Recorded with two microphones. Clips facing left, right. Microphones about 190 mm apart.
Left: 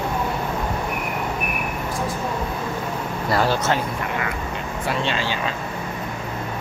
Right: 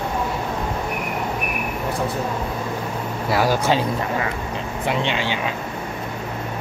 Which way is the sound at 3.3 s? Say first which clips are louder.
Right 2 dB; 10° right (ahead or behind).